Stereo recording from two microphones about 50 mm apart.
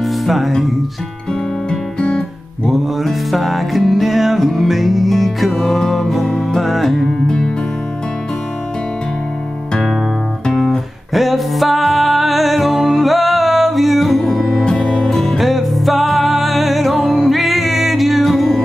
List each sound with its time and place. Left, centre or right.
0.0 s music: centre
1.7 s music: centre
2.7 s music: centre
6.2 s music: centre
6.6 s music: centre
10.5 s music: centre
15.3 s music: centre